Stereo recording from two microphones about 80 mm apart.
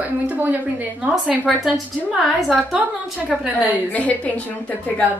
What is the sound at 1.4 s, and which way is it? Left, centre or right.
A woman's voice, centre.